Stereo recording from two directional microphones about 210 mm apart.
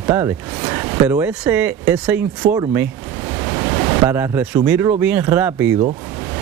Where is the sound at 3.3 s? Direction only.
15° right (ahead or behind).